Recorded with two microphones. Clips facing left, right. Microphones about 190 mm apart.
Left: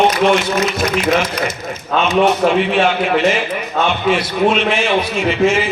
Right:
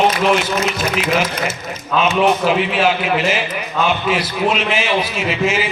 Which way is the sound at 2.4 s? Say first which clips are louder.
Left 2 dB; 5° right (ahead or behind).